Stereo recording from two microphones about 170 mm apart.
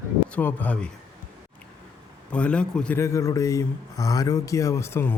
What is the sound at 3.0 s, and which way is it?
Speech, 20° left (ahead or behind).